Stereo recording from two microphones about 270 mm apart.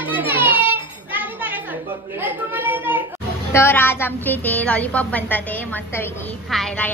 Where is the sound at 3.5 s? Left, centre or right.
Centre.